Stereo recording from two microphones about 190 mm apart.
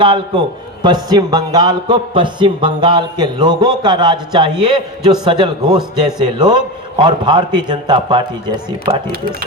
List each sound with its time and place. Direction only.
0.0 s a man's voice: 25° right (ahead or behind)